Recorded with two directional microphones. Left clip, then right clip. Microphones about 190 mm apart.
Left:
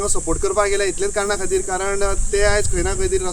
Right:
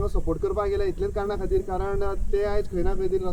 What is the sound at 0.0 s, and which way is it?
Speech, 45° left (ahead or behind).